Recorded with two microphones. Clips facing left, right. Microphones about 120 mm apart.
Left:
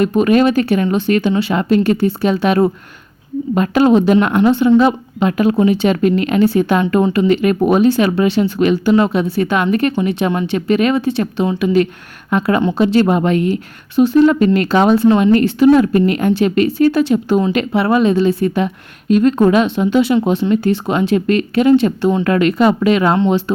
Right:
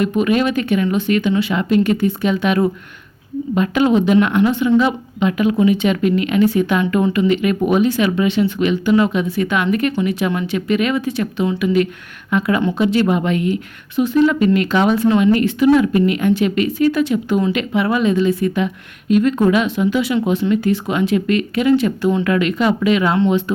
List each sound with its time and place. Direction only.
0.0 s a woman's voice: 40° left (ahead or behind)
14.3 s a woman's voice: 40° left (ahead or behind)
15.2 s a woman's voice: 40° left (ahead or behind)
22.2 s a woman's voice: 40° left (ahead or behind)